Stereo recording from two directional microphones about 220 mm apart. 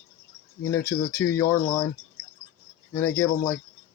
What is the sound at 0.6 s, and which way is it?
Speech, 15° left (ahead or behind).